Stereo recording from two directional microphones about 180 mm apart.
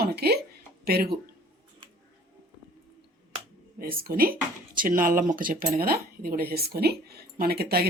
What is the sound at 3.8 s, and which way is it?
Speech, 55° right (ahead or behind).